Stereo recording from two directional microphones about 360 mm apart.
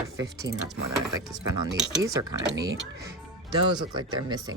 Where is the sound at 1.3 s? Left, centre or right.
Centre.